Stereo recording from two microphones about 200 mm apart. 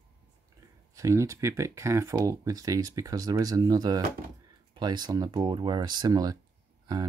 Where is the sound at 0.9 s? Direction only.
15° right (ahead or behind).